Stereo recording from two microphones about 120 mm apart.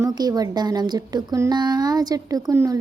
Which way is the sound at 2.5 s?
30° right (ahead or behind).